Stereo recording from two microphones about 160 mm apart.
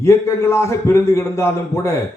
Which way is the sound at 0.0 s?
20° left (ahead or behind).